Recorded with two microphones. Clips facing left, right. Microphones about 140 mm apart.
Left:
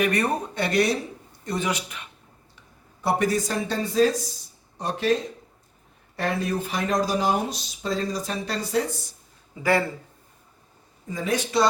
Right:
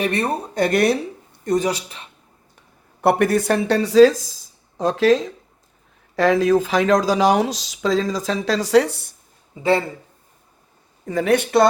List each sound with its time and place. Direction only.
0.0 s speech: 30° right (ahead or behind)
0.5 s speech: 50° right (ahead or behind)
1.5 s speech: 40° right (ahead or behind)
3.0 s speech: 60° right (ahead or behind)
9.5 s speech: 25° right (ahead or behind)
11.0 s speech: 65° right (ahead or behind)